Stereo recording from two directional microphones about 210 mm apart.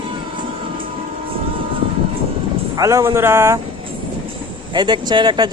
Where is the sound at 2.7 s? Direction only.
15° right (ahead or behind).